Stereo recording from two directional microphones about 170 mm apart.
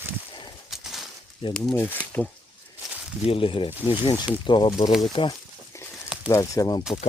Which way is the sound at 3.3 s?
30° left (ahead or behind).